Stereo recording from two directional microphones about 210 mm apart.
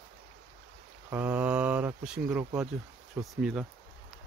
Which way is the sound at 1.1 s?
10° right (ahead or behind).